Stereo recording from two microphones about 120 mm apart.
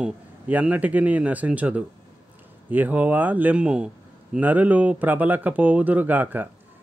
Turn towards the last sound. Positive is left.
turn(degrees=-15)  # may be behind; listen again after turning